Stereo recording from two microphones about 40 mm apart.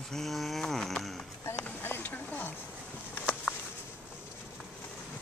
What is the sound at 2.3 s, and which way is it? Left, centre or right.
Speech, left.